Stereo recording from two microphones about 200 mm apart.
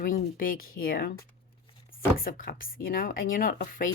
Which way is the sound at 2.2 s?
45° left (ahead or behind).